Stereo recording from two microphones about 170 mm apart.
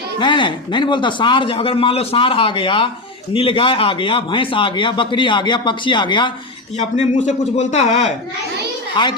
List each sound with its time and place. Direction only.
0.2 s a man's voice: 30° left (ahead or behind)
6.7 s speech: 45° left (ahead or behind)
9.0 s a man's voice: 25° left (ahead or behind)